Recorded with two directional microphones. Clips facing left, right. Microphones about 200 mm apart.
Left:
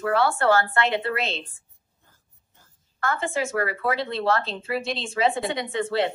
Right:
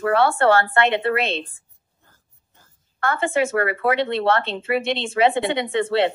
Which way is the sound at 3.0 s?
60° right (ahead or behind).